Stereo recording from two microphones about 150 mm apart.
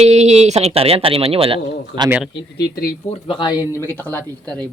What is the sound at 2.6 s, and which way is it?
Speech, 90° left.